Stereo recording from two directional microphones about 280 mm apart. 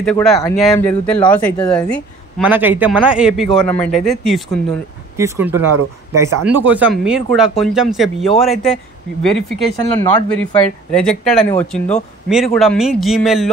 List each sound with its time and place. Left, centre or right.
0.0 s speech: centre